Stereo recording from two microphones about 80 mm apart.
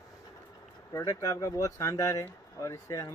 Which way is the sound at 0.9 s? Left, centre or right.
Left.